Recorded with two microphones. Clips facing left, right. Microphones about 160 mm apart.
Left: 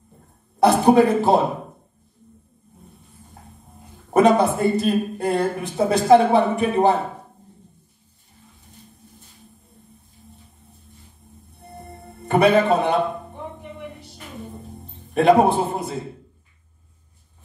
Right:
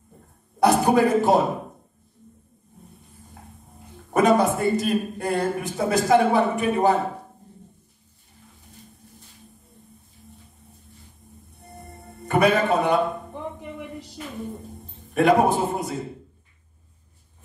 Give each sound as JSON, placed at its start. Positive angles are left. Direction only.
{"t": 0.6, "sound": "a sound", "side_deg": 30}
{"t": 4.1, "sound": "speech", "side_deg": 30}
{"t": 12.3, "sound": "a man's voice", "side_deg": 30}
{"t": 15.1, "sound": "speech", "side_deg": 30}